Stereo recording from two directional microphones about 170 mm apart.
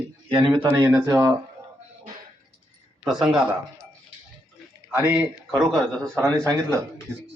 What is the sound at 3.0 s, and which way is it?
Speech, 5° right (ahead or behind).